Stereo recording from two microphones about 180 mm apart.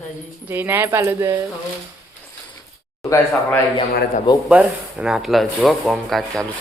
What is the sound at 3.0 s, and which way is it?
Speech, 15° left (ahead or behind).